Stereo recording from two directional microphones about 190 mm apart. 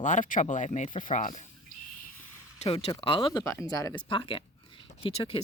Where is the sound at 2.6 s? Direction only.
30° left (ahead or behind).